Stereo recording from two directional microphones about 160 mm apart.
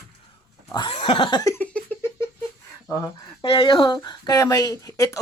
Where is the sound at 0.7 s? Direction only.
30° left (ahead or behind).